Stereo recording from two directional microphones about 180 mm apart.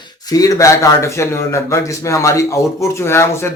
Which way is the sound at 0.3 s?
20° left (ahead or behind).